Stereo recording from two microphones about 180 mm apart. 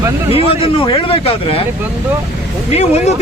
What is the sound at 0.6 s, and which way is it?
Speech, 30° left (ahead or behind).